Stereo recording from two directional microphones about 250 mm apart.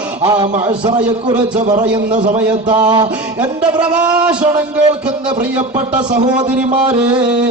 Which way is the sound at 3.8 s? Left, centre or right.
Centre.